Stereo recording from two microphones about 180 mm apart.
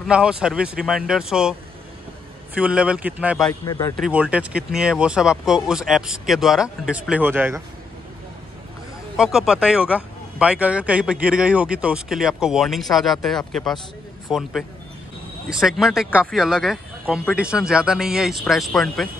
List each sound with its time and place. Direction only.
0.0 s speech: 5° right (ahead or behind)
3.6 s speech: 20° left (ahead or behind)
3.9 s speech: 5° right (ahead or behind)
9.1 s speech: 5° right (ahead or behind)
15.5 s speech: 5° right (ahead or behind)